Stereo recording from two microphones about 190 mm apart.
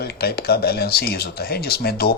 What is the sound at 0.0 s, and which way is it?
Speech, 55° left (ahead or behind).